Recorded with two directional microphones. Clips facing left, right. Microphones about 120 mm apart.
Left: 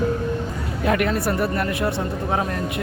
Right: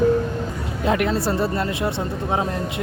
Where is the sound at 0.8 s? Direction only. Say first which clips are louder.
Even; 20° right (ahead or behind).